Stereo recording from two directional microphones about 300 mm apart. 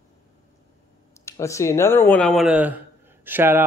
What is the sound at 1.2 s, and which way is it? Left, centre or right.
Speech, centre.